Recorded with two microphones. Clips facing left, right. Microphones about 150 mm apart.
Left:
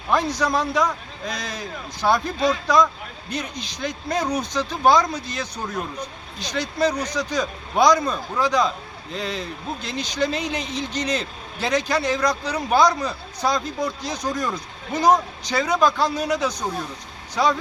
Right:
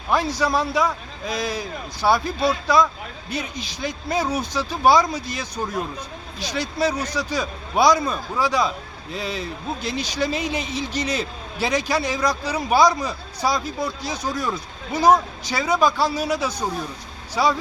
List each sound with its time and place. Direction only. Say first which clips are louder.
0.1 s a man's voice: even; 5° right (ahead or behind)